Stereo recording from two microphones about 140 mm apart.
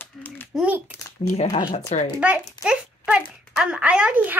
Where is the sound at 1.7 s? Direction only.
55° left (ahead or behind).